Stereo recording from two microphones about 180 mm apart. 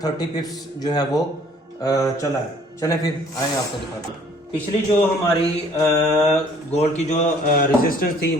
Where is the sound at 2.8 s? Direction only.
20° left (ahead or behind).